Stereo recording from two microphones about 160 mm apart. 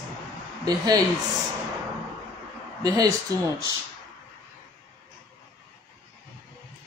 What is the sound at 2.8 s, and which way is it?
Speech, 20° right (ahead or behind).